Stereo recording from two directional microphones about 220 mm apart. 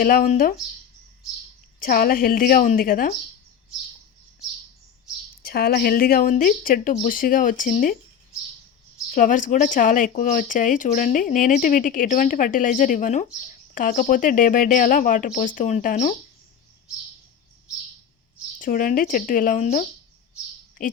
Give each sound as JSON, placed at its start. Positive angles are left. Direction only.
{"t": 0.0, "sound": "speech", "side_deg": 40}
{"t": 1.8, "sound": "speech", "side_deg": 40}
{"t": 5.4, "sound": "speech", "side_deg": 45}
{"t": 9.1, "sound": "speech", "side_deg": 35}
{"t": 18.6, "sound": "speech", "side_deg": 40}